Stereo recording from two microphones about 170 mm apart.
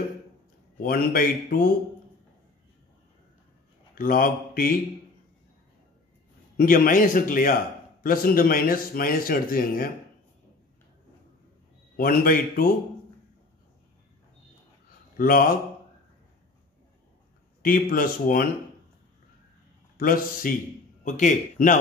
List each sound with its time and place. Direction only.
0.8 s speech: 55° left (ahead or behind)
4.0 s speech: 55° left (ahead or behind)
6.5 s speech: 60° left (ahead or behind)
12.0 s speech: 60° left (ahead or behind)
15.1 s speech: 55° left (ahead or behind)
17.6 s speech: 55° left (ahead or behind)
20.0 s speech: 55° left (ahead or behind)